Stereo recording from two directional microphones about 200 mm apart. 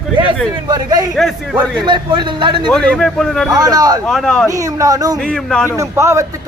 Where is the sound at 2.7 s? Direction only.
5° left (ahead or behind).